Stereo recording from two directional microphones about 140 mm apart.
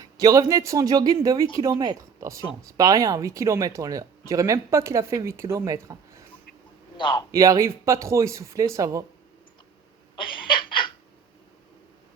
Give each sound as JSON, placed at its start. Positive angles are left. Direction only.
{"t": 0.0, "sound": "speech", "side_deg": -25}
{"t": 6.9, "sound": "a man's voice", "side_deg": 35}
{"t": 7.3, "sound": "speech", "side_deg": -25}
{"t": 10.2, "sound": "a sound", "side_deg": 35}